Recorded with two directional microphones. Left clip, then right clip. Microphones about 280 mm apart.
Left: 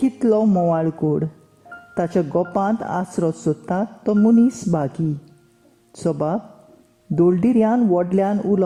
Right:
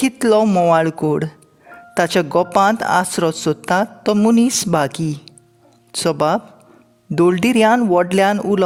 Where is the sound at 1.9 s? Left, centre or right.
Right.